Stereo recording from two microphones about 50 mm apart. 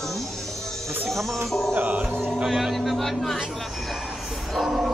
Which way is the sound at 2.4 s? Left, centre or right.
Centre.